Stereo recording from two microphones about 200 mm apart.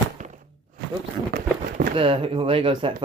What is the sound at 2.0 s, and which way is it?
Speech, 25° right (ahead or behind).